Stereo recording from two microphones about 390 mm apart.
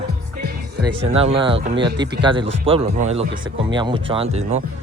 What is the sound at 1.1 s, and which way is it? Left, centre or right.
Speech, centre.